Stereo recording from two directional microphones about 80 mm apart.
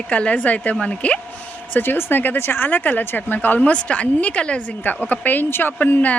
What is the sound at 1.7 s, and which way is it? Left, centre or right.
A woman's voice, left.